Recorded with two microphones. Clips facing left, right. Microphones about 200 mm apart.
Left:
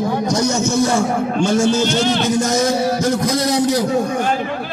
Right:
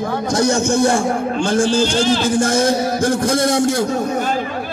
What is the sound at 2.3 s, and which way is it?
A man's voice, 50° right (ahead or behind).